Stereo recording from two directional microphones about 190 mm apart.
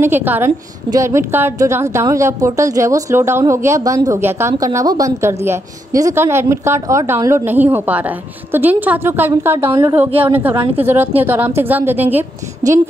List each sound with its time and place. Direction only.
0.0 s a woman's voice: 10° right (ahead or behind); by 10.9 s 25° right (ahead or behind)
10.9 s a woman's voice: 10° right (ahead or behind)